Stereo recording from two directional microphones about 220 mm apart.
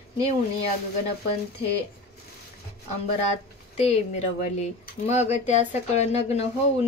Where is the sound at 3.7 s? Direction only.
30° left (ahead or behind).